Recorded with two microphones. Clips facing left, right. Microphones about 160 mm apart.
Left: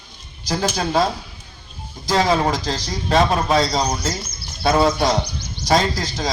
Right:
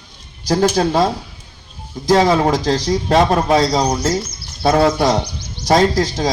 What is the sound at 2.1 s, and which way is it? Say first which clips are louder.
A man's voice: right 5 dB; 50° right (ahead or behind).